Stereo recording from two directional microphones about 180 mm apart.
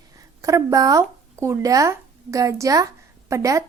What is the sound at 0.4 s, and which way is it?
A woman's voice, 20° right (ahead or behind).